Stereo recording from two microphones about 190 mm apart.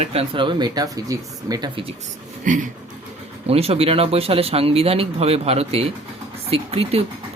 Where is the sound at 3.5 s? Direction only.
30° right (ahead or behind).